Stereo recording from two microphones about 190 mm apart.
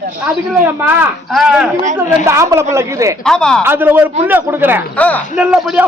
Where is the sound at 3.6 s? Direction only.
10° right (ahead or behind).